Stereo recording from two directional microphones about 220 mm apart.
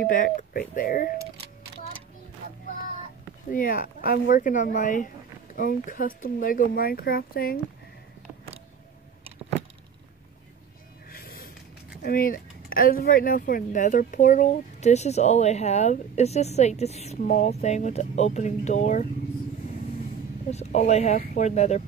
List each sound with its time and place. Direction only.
0.0 s speech: 35° left (ahead or behind)
3.4 s speech: 40° left (ahead or behind)
11.1 s snort: 40° left (ahead or behind)
12.0 s speech: 40° left (ahead or behind)
20.4 s speech: 30° left (ahead or behind)